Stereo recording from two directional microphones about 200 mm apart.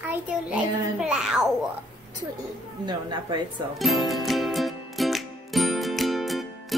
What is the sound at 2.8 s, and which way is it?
Speech, 20° right (ahead or behind).